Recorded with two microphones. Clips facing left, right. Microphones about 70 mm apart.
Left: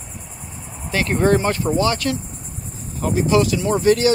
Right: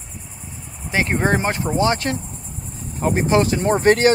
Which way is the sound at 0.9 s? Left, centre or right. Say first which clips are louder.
Left 2 dB; right.